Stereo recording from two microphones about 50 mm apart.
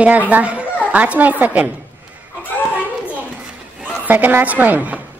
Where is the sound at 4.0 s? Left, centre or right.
Right.